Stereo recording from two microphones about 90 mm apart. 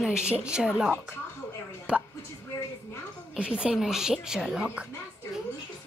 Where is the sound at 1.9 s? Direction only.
10° right (ahead or behind).